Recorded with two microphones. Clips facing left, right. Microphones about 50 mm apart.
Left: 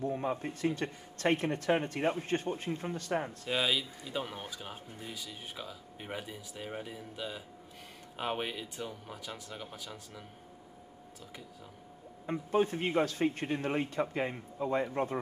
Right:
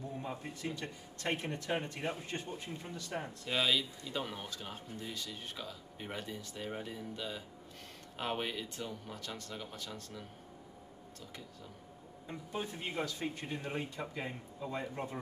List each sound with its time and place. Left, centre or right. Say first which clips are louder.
0.0 s speech: left 8 dB; left
3.4 s speech: right 2 dB; centre
12.3 s speech: left 11 dB; left